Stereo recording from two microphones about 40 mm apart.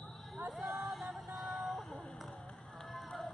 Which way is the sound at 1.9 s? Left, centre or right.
Left.